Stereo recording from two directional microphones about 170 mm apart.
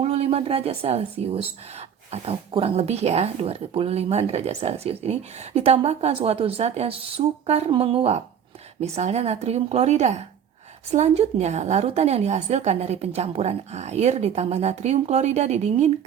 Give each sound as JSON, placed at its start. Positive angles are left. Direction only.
{"t": 0.0, "sound": "a woman's voice", "side_deg": -40}